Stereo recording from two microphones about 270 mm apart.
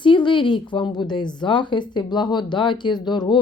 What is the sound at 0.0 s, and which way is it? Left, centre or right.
A woman's voice, centre.